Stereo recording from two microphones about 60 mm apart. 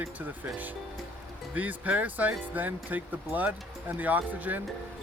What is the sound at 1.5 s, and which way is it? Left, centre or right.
Speech, right.